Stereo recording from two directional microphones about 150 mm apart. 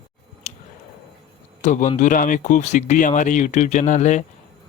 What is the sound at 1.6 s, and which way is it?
Speech, 55° left (ahead or behind).